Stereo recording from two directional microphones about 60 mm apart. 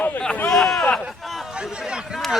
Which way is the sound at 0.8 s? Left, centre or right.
Left.